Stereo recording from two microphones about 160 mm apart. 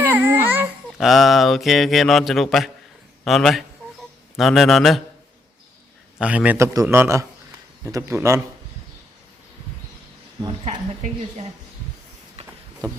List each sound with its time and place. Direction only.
0.0 s babbling: 10° right (ahead or behind)
0.9 s speech: centre (ahead or behind)
6.1 s a man's voice: 10° right (ahead or behind)
12.4 s a sound: 40° right (ahead or behind)